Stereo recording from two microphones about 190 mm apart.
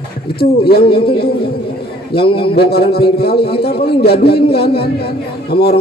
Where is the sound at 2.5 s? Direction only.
55° left (ahead or behind).